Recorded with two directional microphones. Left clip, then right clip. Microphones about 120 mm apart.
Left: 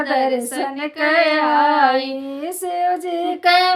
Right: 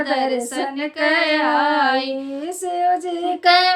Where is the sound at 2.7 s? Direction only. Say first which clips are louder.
Right 1 dB; 35° left (ahead or behind).